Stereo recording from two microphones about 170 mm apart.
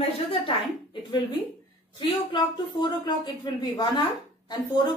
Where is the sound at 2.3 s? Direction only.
25° left (ahead or behind).